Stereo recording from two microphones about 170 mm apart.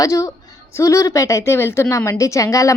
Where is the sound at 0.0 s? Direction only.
20° left (ahead or behind).